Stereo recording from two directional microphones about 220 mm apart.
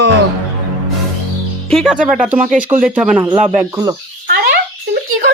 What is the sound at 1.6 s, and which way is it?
Speech, centre (ahead or behind).